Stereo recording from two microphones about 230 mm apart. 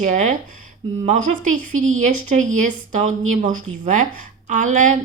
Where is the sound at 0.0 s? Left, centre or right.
Right.